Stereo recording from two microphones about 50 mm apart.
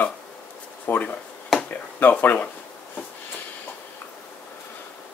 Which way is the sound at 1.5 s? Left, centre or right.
Left.